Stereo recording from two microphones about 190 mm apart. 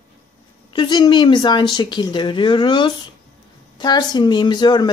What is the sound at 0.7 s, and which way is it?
A woman's voice, 25° left (ahead or behind).